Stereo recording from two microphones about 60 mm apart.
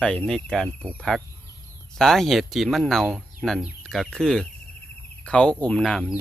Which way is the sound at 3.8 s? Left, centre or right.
Centre.